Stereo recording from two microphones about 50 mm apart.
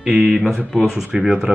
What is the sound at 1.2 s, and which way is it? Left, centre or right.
Speech, centre.